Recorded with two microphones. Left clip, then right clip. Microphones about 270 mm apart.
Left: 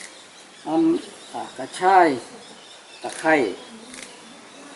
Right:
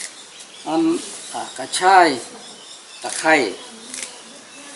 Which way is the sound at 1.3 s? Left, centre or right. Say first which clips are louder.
Right 3 dB; centre.